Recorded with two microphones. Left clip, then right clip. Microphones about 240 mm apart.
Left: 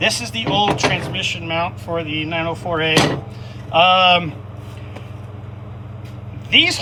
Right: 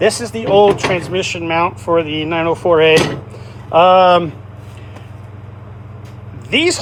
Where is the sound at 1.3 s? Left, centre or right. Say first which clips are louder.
Right 6 dB; right.